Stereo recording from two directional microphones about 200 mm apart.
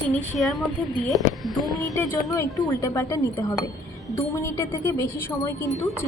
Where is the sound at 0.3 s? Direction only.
Centre (ahead or behind).